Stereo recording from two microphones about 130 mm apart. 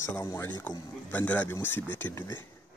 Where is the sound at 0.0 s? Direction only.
20° left (ahead or behind).